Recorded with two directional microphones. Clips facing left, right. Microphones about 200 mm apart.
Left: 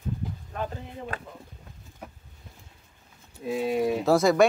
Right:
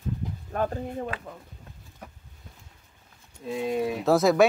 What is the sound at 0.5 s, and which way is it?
Speech, 50° right (ahead or behind).